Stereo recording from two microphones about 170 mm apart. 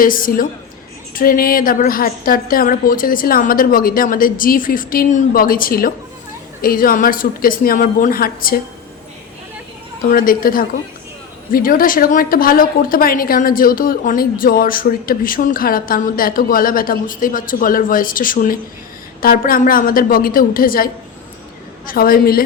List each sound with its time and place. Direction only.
0.0 s a woman's voice: 55° left (ahead or behind)
10.0 s a woman's voice: 55° left (ahead or behind)